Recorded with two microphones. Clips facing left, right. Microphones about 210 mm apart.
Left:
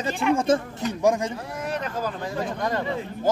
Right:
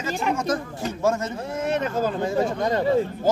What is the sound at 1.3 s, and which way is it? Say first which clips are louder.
Speech: right 5 dB; 25° right (ahead or behind).